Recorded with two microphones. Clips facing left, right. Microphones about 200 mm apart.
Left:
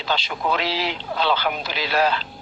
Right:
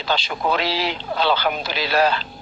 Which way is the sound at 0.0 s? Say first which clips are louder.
Right 2 dB; 35° right (ahead or behind).